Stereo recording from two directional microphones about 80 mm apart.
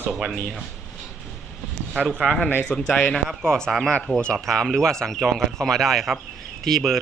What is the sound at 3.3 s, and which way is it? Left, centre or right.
Speech, centre.